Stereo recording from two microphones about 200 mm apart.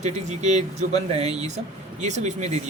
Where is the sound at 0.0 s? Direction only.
35° right (ahead or behind).